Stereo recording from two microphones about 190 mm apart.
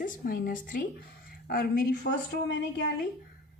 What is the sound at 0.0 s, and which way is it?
A woman's voice, 50° left (ahead or behind).